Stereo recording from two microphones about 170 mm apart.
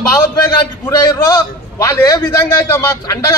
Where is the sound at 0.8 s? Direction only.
20° left (ahead or behind).